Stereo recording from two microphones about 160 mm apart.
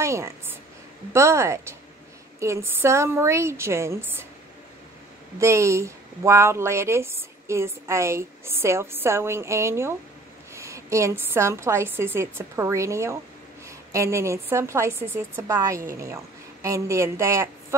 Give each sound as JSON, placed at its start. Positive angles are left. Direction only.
{"t": 0.0, "sound": "a sound", "side_deg": -15}
{"t": 1.1, "sound": "speech", "side_deg": -15}
{"t": 5.4, "sound": "a woman's voice", "side_deg": -20}